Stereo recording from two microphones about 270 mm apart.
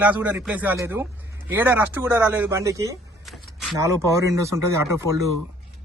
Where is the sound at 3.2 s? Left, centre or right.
Centre.